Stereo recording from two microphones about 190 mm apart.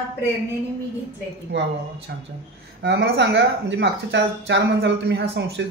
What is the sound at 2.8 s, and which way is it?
Speech, 65° right (ahead or behind).